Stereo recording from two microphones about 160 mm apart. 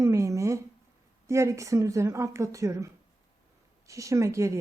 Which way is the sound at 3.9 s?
20° right (ahead or behind).